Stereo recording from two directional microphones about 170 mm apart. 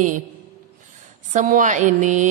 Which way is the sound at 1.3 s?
50° right (ahead or behind).